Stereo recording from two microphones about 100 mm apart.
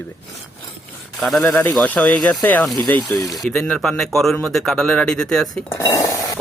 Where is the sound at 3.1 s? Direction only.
40° left (ahead or behind).